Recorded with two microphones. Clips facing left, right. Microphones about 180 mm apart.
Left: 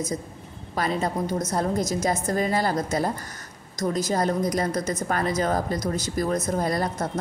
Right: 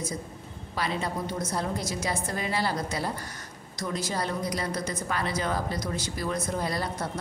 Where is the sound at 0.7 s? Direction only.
45° left (ahead or behind).